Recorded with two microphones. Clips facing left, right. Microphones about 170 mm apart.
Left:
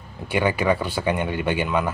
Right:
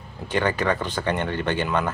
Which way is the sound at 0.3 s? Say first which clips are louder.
Left 2 dB; 10° left (ahead or behind).